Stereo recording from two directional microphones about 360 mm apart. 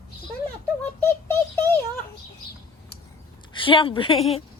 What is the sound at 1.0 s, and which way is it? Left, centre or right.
Synthetic singing, centre.